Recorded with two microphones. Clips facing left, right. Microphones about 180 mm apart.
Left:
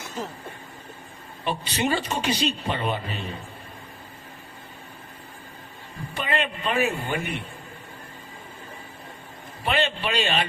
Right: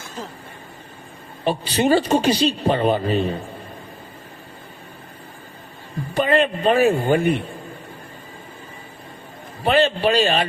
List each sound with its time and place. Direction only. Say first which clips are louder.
1.5 s a man's voice: right 8 dB; 35° right (ahead or behind)
6.1 s a man's voice: right 10 dB; 35° right (ahead or behind)
9.6 s a man's voice: right 8 dB; 35° right (ahead or behind)